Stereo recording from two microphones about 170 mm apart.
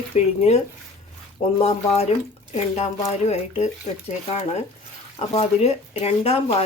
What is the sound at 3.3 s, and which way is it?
Speech, 40° left (ahead or behind).